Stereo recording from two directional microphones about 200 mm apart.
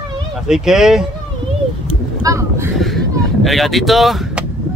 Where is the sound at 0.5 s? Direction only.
5° right (ahead or behind).